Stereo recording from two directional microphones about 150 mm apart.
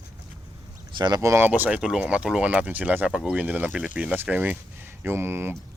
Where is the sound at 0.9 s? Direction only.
30° right (ahead or behind).